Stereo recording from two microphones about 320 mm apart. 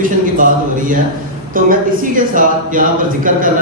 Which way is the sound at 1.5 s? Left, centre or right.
Right.